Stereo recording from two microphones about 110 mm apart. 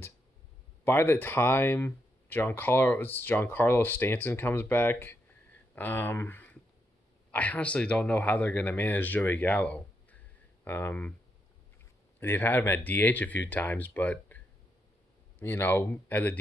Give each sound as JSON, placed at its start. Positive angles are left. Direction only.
{"t": 0.8, "sound": "speech", "side_deg": 25}
{"t": 12.2, "sound": "speech", "side_deg": 20}